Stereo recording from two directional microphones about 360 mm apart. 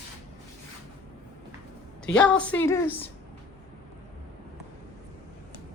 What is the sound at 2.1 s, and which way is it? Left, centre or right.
Speech, centre.